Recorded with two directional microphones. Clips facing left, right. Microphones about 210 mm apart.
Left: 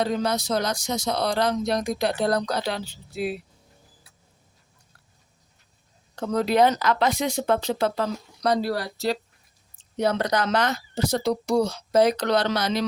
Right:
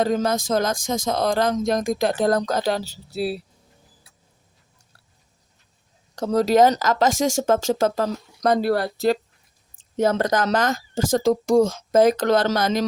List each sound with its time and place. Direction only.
0.0 s speech: 45° right (ahead or behind)
6.1 s speech: 40° right (ahead or behind)